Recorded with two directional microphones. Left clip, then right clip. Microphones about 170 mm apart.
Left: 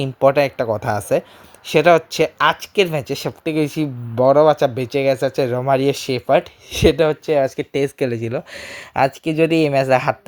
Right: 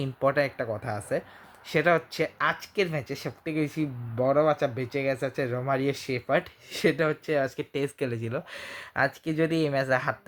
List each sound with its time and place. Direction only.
0.0 s speech: 35° left (ahead or behind)
6.0 s speech: 5° left (ahead or behind)
6.7 s speech: 35° left (ahead or behind)